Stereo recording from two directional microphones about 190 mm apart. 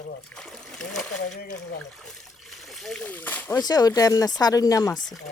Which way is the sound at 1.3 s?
55° left (ahead or behind).